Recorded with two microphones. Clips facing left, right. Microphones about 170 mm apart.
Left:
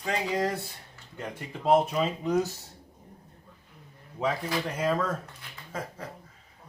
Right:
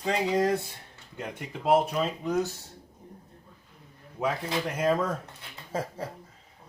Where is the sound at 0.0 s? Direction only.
25° right (ahead or behind).